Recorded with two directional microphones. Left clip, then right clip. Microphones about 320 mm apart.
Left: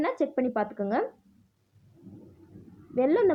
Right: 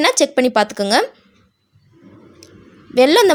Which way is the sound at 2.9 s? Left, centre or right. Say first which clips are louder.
Right 12 dB; right.